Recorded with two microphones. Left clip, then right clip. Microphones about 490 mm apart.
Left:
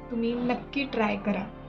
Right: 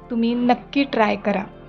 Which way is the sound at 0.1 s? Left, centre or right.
Right.